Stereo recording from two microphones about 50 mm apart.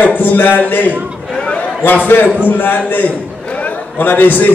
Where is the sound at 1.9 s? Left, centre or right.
Left.